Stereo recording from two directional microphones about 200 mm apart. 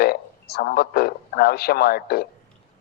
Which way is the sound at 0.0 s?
50° left (ahead or behind).